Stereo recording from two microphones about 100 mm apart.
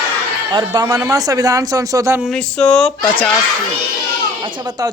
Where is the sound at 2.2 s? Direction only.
5° left (ahead or behind).